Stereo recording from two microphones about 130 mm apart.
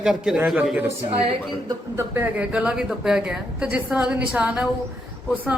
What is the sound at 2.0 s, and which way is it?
A woman's voice, 15° right (ahead or behind).